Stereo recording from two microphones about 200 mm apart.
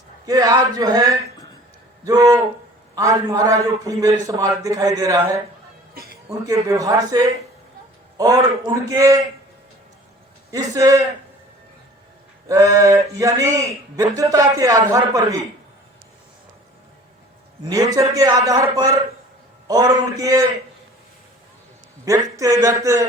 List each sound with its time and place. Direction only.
0.3 s a man's voice: 20° right (ahead or behind)
6.4 s a man's voice: 15° right (ahead or behind)
10.5 s a man's voice: 15° right (ahead or behind)
12.5 s a man's voice: 15° right (ahead or behind)
17.9 s a man's voice: 15° right (ahead or behind)
22.0 s a man's voice: 15° right (ahead or behind)